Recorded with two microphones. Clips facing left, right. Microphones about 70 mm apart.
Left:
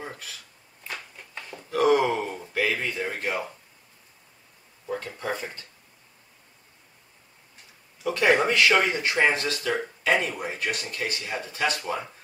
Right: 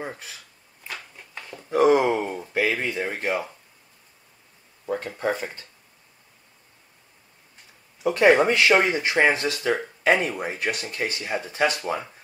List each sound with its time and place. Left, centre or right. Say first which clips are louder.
0.0 s speech: right 4 dB; right
0.8 s a sound: even; centre
1.7 s speech: right 3 dB; right
5.2 s speech: right 5 dB; right
8.0 s speech: right 4 dB; right